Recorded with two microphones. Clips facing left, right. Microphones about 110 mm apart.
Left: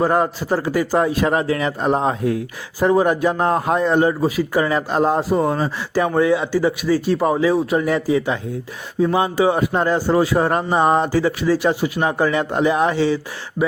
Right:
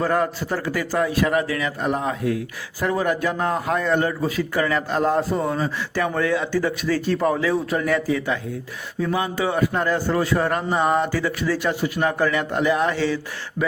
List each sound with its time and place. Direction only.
0.0 s a man's voice: 20° left (ahead or behind)
0.9 s a man's voice: 30° left (ahead or behind)